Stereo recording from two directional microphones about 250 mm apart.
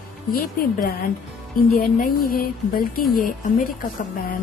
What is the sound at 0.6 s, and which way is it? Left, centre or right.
Speech, left.